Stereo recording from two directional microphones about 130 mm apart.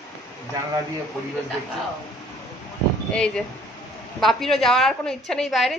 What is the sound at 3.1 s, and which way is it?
A woman's voice, 5° left (ahead or behind).